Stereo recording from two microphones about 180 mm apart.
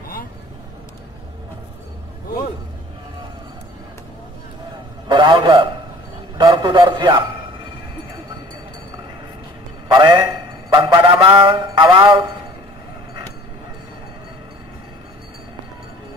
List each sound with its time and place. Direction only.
5.0 s a man's voice: 25° right (ahead or behind)
9.9 s a man's voice: 25° right (ahead or behind)
10.7 s honk: 25° right (ahead or behind)
11.1 s a man's voice: 30° right (ahead or behind)